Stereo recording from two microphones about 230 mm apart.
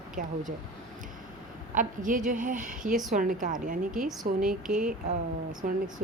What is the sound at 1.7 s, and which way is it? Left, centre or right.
A woman's voice, right.